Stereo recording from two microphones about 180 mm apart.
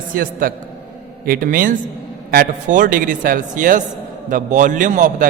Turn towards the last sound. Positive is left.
turn(degrees=-45)  # may be behind; listen again after turning